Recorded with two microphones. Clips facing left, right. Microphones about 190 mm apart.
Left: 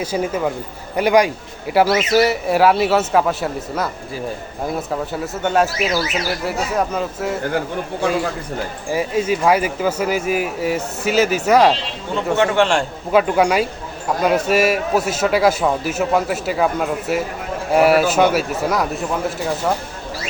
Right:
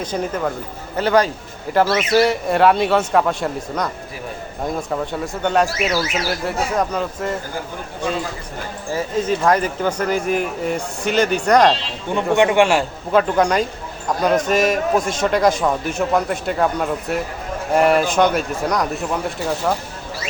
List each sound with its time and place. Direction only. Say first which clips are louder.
0.0 s a man's voice: left 2 dB; 10° left (ahead or behind)
8.9 s speech: left 1 dB; 10° left (ahead or behind)
12.1 s speech: right 2 dB; 15° right (ahead or behind)
13.1 s a man's voice: left 1 dB; 10° left (ahead or behind)